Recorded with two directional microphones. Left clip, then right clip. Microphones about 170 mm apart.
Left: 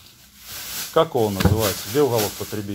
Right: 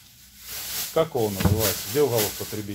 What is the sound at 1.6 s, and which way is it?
Speech, 25° left (ahead or behind).